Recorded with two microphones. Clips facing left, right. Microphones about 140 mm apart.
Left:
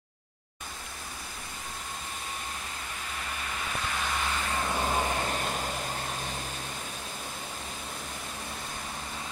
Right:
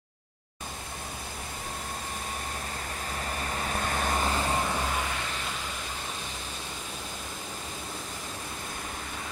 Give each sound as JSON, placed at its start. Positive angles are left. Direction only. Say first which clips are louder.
{"t": 3.3, "sound": "vehicle", "louder": "right 4 dB", "side_deg": -40}
{"t": 4.9, "sound": "vehicle", "louder": "left 4 dB", "side_deg": 35}